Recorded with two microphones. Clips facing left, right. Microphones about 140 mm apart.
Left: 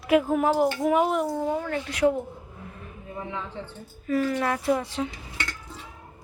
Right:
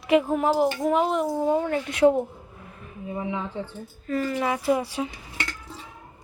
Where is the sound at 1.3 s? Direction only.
20° right (ahead or behind).